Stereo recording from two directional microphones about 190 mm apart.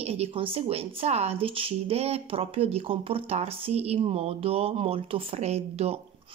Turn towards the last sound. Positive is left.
turn(degrees=-35)  # may be behind; listen again after turning